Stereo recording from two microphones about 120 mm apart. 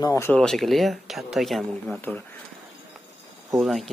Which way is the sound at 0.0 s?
20° left (ahead or behind).